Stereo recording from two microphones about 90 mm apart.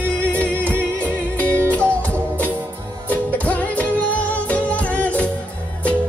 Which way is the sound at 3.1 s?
15° left (ahead or behind).